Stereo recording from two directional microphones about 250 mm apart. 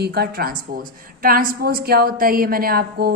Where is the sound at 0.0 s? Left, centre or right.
Right.